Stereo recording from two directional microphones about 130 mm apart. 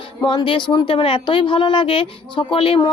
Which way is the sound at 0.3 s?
40° left (ahead or behind).